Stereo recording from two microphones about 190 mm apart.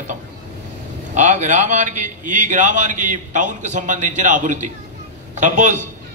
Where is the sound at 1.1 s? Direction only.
40° right (ahead or behind).